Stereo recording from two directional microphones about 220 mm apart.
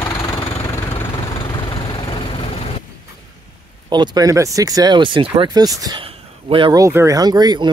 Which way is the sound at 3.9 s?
20° right (ahead or behind).